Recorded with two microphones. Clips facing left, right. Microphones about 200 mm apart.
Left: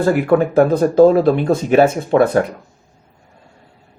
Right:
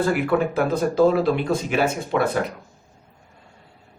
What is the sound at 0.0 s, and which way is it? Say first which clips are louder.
Speech: left 6 dB; 50° left (ahead or behind).